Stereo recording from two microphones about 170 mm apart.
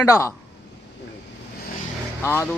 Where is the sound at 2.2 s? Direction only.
15° left (ahead or behind).